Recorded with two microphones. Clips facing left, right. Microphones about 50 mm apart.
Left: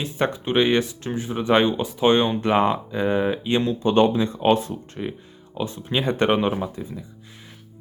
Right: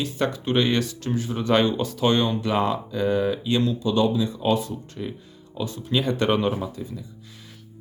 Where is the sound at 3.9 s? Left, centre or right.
Left.